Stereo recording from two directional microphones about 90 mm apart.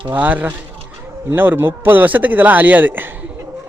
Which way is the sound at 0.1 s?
20° right (ahead or behind).